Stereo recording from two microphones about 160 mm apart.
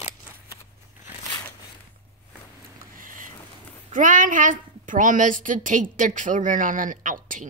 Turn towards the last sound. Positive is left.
turn(degrees=-55)  # may be behind; listen again after turning